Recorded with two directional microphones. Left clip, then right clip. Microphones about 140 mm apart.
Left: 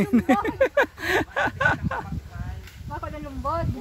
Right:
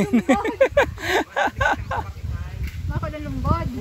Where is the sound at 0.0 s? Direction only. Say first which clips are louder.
Right 2 dB; 15° left (ahead or behind).